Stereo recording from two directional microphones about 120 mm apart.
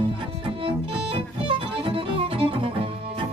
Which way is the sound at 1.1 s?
50° right (ahead or behind).